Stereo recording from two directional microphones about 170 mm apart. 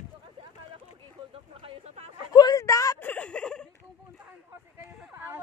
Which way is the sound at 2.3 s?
20° left (ahead or behind).